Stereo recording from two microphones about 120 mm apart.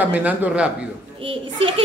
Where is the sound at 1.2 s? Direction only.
50° right (ahead or behind).